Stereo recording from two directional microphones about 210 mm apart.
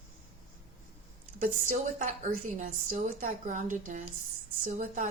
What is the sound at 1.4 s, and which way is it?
Speech, 40° right (ahead or behind).